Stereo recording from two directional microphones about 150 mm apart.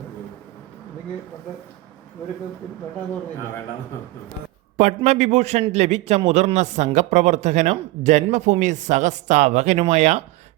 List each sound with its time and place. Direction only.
4.8 s a man's voice: 50° right (ahead or behind)